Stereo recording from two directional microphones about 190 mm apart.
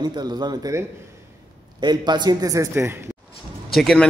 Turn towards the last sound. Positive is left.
turn(degrees=5)  # may be behind; listen again after turning